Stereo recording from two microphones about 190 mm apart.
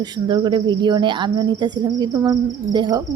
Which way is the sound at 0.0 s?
25° right (ahead or behind).